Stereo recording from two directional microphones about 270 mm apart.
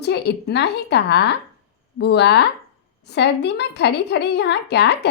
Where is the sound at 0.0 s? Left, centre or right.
Left.